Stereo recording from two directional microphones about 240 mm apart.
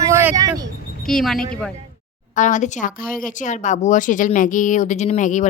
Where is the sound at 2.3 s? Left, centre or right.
Left.